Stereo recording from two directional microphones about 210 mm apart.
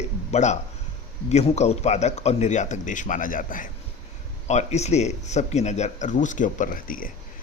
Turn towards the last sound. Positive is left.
turn(degrees=40)  # may be behind; listen again after turning